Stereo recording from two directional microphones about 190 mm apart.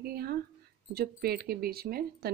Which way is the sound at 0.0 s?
55° right (ahead or behind).